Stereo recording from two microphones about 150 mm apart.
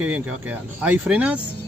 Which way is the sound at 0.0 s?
10° right (ahead or behind).